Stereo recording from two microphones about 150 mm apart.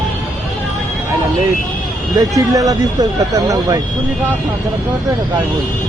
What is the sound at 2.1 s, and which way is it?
Speech, 25° right (ahead or behind).